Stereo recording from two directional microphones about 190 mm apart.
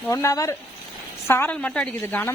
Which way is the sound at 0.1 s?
15° left (ahead or behind).